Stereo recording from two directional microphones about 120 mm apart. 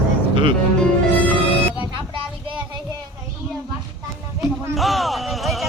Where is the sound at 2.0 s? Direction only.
45° right (ahead or behind).